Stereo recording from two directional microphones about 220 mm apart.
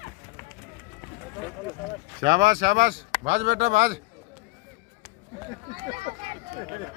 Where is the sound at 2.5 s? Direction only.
40° right (ahead or behind).